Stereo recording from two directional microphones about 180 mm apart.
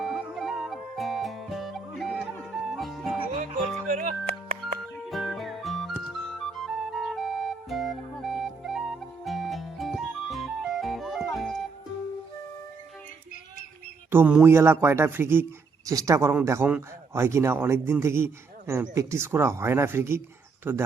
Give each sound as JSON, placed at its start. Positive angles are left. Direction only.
{"t": 0.0, "sound": "music", "side_deg": -5}
{"t": 3.8, "sound": "music", "side_deg": -45}
{"t": 4.6, "sound": "music", "side_deg": 0}
{"t": 6.7, "sound": "flute", "side_deg": 0}
{"t": 14.1, "sound": "speech", "side_deg": -10}